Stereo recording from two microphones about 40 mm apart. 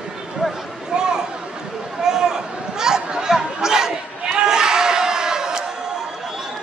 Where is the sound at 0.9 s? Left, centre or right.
Centre.